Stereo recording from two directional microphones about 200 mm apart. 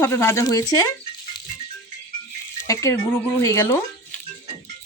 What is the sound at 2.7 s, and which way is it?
Speech, 15° left (ahead or behind).